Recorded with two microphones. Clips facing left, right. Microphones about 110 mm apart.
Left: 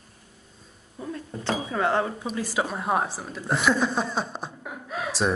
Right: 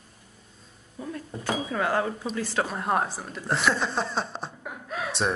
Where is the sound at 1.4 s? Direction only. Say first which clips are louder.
Left 2 dB; 25° left (ahead or behind).